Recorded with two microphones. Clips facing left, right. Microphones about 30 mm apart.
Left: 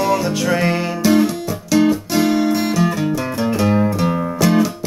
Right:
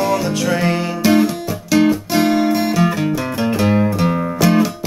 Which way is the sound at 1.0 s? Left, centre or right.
Centre.